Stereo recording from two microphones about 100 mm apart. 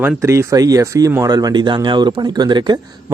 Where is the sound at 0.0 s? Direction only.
30° right (ahead or behind).